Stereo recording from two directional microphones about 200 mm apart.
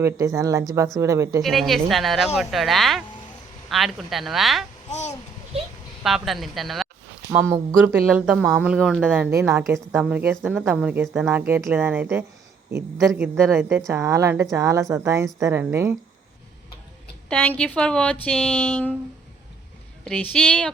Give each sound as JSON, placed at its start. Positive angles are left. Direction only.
{"t": 0.0, "sound": "a woman's voice", "side_deg": -15}
{"t": 1.4, "sound": "a woman's voice", "side_deg": 0}
{"t": 4.9, "sound": "a sound", "side_deg": 35}
{"t": 6.0, "sound": "a woman's voice", "side_deg": 0}
{"t": 7.3, "sound": "a woman's voice", "side_deg": -15}
{"t": 7.9, "sound": "a woman's voice", "side_deg": 0}
{"t": 17.2, "sound": "a woman's voice", "side_deg": 10}
{"t": 20.3, "sound": "a woman's voice", "side_deg": 5}